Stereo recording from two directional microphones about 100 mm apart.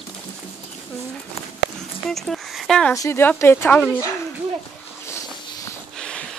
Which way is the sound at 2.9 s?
30° left (ahead or behind).